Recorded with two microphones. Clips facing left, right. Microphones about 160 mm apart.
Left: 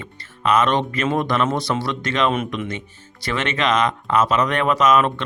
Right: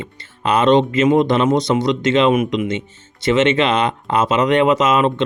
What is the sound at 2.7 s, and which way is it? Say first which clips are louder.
Speech: right 7 dB; 25° right (ahead or behind).